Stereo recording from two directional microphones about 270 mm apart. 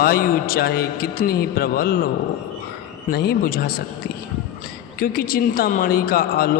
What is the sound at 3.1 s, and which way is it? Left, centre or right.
Speech, left.